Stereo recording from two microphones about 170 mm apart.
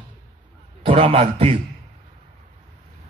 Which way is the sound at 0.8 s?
35° right (ahead or behind).